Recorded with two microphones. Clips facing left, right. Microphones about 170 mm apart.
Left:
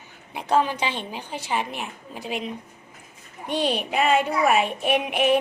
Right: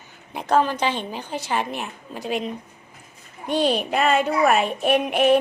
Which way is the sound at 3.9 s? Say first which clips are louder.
Left 3 dB; 5° left (ahead or behind).